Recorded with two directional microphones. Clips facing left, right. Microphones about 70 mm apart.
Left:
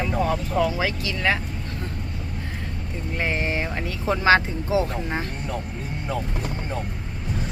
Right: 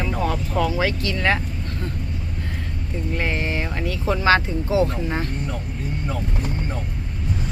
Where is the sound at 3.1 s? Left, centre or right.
Centre.